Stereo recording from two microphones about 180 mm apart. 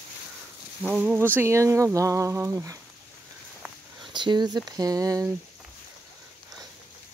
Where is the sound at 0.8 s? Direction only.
5° right (ahead or behind).